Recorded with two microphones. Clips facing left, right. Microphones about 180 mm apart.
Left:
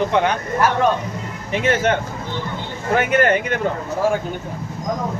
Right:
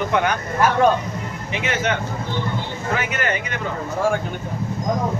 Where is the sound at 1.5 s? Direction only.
50° left (ahead or behind).